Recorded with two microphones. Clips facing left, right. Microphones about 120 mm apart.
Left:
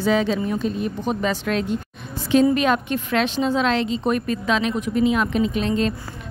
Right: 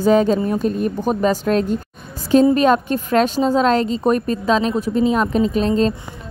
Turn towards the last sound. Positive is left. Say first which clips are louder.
# right 5 dB
turn(degrees=-35)  # may be behind; listen again after turning